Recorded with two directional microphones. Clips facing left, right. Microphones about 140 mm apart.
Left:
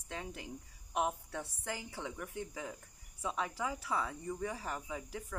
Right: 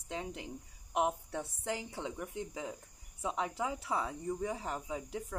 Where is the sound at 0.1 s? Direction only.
20° right (ahead or behind).